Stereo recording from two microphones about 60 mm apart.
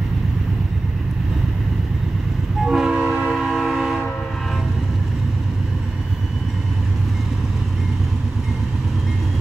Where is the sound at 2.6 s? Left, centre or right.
Centre.